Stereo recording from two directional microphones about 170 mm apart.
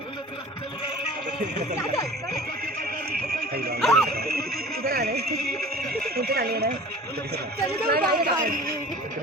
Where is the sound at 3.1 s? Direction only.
65° right (ahead or behind).